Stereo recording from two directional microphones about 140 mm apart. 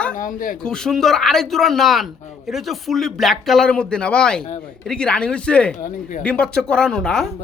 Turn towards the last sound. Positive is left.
turn(degrees=5)  # may be behind; listen again after turning